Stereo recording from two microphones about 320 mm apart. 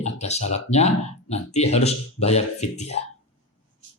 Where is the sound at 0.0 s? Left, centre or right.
Left.